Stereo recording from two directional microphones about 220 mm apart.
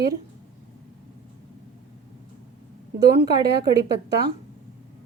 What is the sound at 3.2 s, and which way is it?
A woman's voice, 20° right (ahead or behind).